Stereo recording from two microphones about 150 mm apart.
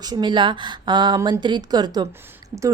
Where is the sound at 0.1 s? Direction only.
30° right (ahead or behind).